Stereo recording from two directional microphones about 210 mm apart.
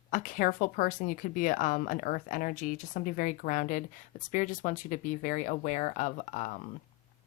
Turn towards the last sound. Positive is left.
turn(degrees=35)  # may be behind; listen again after turning